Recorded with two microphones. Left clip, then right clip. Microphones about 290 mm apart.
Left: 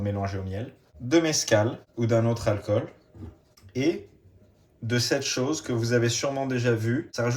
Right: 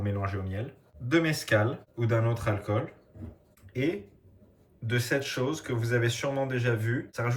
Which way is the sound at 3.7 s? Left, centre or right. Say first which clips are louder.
Left 4 dB; centre.